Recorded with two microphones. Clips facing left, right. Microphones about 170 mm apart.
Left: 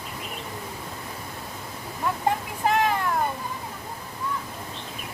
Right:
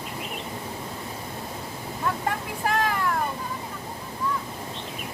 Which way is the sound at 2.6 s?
20° left (ahead or behind).